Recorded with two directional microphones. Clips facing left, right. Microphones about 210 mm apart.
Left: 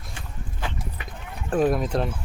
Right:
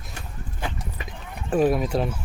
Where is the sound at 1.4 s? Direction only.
5° right (ahead or behind).